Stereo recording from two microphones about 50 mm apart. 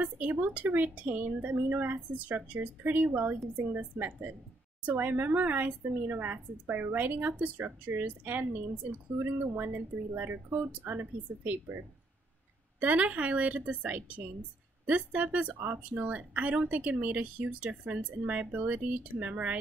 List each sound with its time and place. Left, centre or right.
0.0 s a woman's voice: right
2.0 s a woman's voice: right
12.8 s a woman's voice: right